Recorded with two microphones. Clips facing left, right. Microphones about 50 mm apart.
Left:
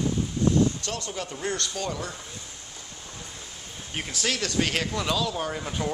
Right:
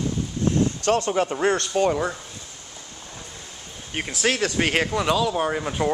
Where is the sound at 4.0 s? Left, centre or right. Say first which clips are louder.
Right 5 dB; centre.